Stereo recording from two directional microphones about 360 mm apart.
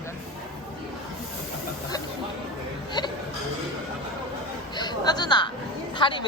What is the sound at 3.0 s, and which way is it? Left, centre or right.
Speech, centre.